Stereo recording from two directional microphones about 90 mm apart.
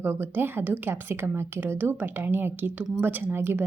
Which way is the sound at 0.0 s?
25° right (ahead or behind).